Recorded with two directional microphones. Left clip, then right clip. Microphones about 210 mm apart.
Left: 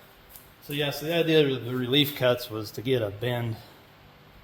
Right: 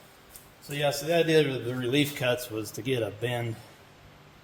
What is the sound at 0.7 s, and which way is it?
A man's voice, 15° left (ahead or behind).